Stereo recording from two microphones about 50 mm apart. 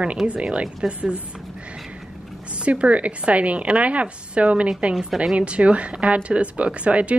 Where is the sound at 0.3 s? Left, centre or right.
Right.